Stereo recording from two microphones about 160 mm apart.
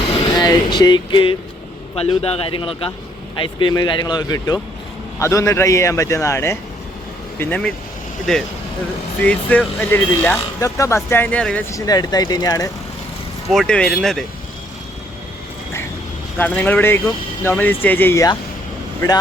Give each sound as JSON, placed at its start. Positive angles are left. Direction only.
{"t": 0.1, "sound": "a man's voice", "side_deg": 30}
{"t": 11.7, "sound": "speech", "side_deg": 25}
{"t": 13.5, "sound": "speech", "side_deg": 5}
{"t": 16.4, "sound": "a man's voice", "side_deg": 10}